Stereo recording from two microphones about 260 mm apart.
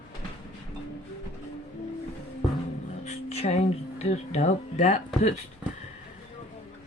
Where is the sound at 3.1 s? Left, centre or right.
Left.